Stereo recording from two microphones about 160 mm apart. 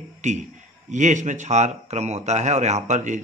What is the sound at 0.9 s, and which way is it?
Speech, 50° right (ahead or behind).